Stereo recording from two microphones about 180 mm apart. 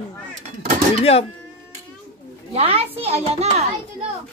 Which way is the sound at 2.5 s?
35° right (ahead or behind).